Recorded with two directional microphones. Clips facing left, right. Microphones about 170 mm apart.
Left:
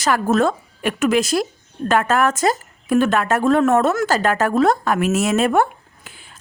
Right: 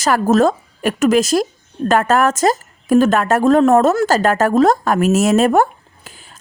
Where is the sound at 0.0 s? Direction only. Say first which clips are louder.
Right 4 dB; 45° right (ahead or behind).